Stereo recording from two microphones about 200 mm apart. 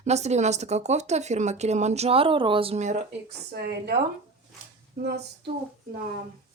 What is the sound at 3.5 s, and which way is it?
Speech, 55° right (ahead or behind).